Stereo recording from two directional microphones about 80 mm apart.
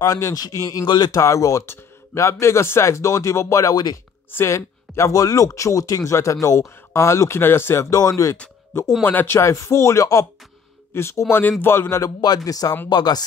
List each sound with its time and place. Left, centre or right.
0.0 s a man's voice: left
0.8 s speech: left
1.2 s speech: left
1.7 s a sound: left
2.4 s speech: left
3.7 s speech: left
4.3 s speech: left
7.9 s speech: left
9.0 s speech: left
12.4 s a man's voice: left
12.9 s speech: left